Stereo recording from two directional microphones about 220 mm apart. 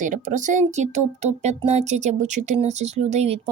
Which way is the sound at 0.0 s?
35° right (ahead or behind).